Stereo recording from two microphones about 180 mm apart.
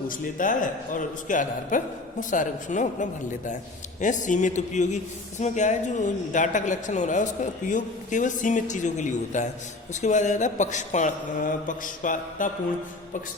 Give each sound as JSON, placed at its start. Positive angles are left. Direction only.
{"t": 0.1, "sound": "a woman's voice", "side_deg": 50}